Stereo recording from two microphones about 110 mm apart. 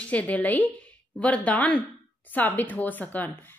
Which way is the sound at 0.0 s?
15° left (ahead or behind).